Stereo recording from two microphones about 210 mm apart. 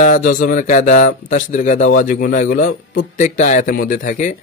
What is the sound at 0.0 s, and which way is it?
Speech, 40° left (ahead or behind).